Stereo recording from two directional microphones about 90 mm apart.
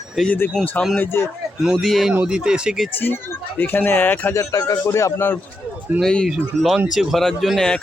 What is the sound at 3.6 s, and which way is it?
Speech, 20° left (ahead or behind).